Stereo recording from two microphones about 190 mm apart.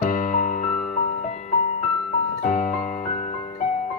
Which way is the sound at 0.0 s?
45° left (ahead or behind).